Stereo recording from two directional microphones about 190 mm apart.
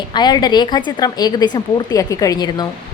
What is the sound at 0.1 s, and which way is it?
A woman's voice, 20° left (ahead or behind).